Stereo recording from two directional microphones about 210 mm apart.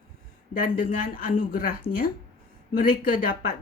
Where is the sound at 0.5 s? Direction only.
40° left (ahead or behind).